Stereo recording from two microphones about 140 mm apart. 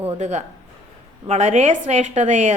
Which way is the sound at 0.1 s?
55° right (ahead or behind).